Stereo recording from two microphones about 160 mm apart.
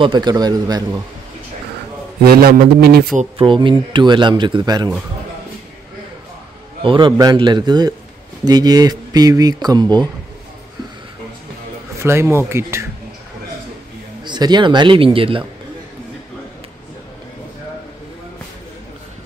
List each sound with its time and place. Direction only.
0.0 s a man's voice: 30° right (ahead or behind)
2.2 s a man's voice: 75° right (ahead or behind)
3.3 s a man's voice: 30° right (ahead or behind)
6.8 s a man's voice: 30° right (ahead or behind)
12.0 s speech: 15° right (ahead or behind)
14.2 s a man's voice: 30° right (ahead or behind)